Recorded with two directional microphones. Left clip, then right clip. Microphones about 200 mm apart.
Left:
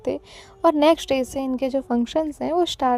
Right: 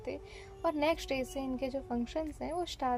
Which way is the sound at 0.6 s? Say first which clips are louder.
Left 14 dB; 50° left (ahead or behind).